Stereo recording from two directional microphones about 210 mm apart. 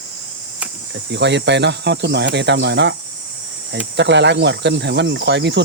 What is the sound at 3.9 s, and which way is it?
Speech, 55° right (ahead or behind).